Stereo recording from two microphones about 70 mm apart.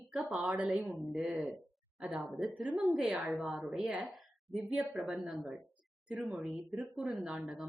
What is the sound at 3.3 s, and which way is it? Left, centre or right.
Speech, centre.